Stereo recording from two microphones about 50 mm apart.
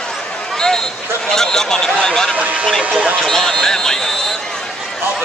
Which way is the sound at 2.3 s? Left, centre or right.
Right.